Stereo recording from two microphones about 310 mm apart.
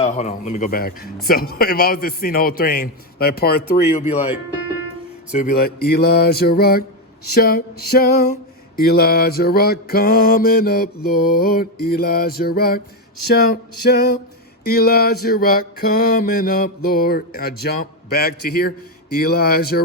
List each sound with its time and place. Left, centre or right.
0.0 s a man's voice: left
5.3 s a man's voice: left
7.3 s music: left
8.8 s a man's voice: left
14.6 s a man's voice: left